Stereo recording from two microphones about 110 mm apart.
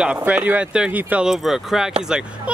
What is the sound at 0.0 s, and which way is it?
Speech, 10° right (ahead or behind).